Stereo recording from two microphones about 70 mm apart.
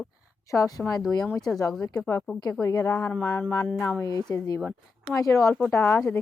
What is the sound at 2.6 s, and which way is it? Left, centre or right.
A woman's voice, left.